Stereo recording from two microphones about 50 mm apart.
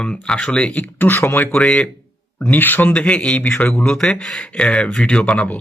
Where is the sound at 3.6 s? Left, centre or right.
Left.